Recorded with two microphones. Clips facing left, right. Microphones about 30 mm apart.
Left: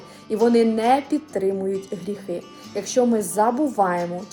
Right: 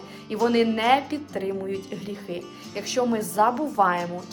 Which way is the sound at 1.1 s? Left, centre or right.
Right.